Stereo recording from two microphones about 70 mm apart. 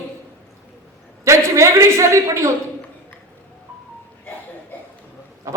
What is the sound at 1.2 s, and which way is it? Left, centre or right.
A man's voice, right.